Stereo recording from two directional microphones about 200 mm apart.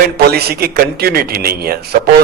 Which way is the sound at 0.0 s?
50° right (ahead or behind).